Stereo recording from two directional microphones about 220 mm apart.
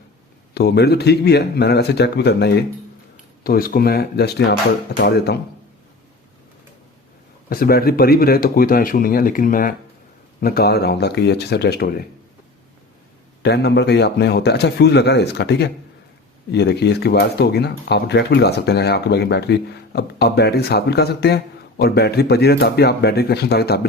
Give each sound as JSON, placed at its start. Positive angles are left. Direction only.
{"t": 0.5, "sound": "speech", "side_deg": 50}
{"t": 7.5, "sound": "speech", "side_deg": 40}
{"t": 13.4, "sound": "speech", "side_deg": 50}